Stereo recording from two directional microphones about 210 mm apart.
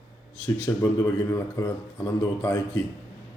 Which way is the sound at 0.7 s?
20° left (ahead or behind).